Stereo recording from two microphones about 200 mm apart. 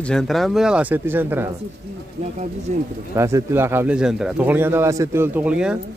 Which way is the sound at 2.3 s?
35° right (ahead or behind).